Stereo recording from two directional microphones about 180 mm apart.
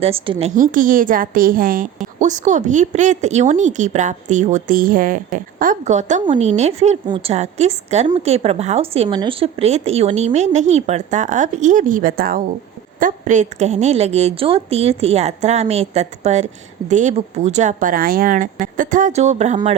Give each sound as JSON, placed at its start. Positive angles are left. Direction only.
{"t": 0.0, "sound": "a woman's voice", "side_deg": -30}
{"t": 0.5, "sound": "a woman's voice", "side_deg": -45}